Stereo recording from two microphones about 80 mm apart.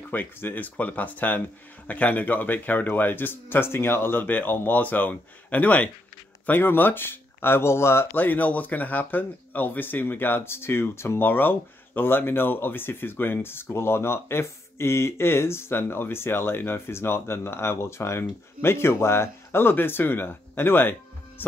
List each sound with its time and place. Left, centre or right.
0.1 s speech: left
21.4 s music: left